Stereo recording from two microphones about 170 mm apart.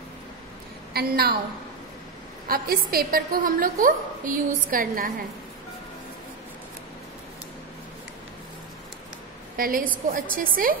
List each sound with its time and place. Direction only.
0.9 s a woman's voice: 65° right (ahead or behind)
2.4 s a woman's voice: 60° right (ahead or behind)
9.6 s a woman's voice: 55° right (ahead or behind)